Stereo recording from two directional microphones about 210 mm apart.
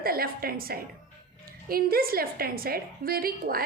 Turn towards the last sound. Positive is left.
turn(degrees=-45)  # may be behind; listen again after turning